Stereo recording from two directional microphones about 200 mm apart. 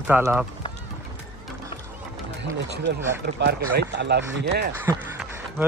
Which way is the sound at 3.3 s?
55° right (ahead or behind).